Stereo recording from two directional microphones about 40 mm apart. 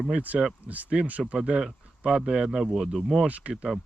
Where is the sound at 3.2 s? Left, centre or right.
Right.